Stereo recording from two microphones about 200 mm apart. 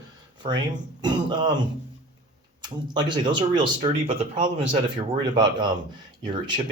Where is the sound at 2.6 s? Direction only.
20° right (ahead or behind).